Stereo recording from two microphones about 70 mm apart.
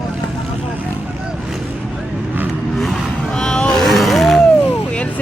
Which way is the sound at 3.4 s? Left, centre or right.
Centre.